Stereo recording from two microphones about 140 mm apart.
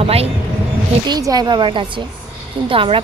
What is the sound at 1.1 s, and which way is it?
A woman's voice, 30° right (ahead or behind).